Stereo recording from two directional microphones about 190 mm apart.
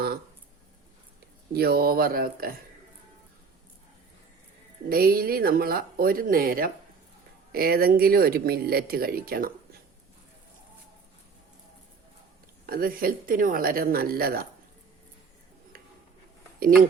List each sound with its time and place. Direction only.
1.5 s speech: 55° right (ahead or behind)
4.9 s speech: 50° right (ahead or behind)
12.6 s speech: 50° right (ahead or behind)